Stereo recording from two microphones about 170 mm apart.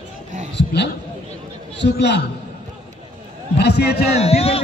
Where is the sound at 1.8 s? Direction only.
90° left.